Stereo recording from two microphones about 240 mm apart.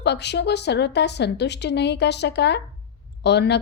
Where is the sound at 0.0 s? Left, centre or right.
Left.